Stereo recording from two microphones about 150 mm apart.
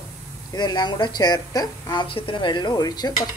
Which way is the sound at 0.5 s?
30° left (ahead or behind).